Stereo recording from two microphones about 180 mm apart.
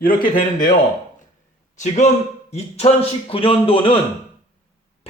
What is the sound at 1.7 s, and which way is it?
A man's voice, 40° left (ahead or behind).